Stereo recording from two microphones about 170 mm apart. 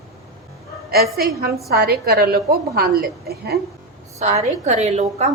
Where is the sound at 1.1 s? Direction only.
65° right (ahead or behind).